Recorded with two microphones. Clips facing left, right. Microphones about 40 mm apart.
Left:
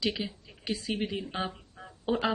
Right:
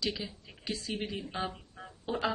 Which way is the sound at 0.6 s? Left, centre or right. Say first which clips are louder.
Left 4 dB; centre.